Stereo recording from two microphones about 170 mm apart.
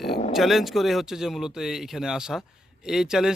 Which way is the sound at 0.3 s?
Centre (ahead or behind).